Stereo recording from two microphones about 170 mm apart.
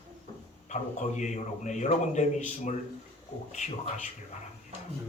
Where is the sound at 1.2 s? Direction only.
45° left (ahead or behind).